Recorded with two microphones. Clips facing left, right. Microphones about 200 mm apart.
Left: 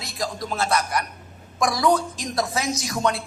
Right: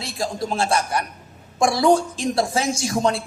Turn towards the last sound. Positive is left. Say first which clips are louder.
# right 3 dB
turn(degrees=-30)  # may be behind; listen again after turning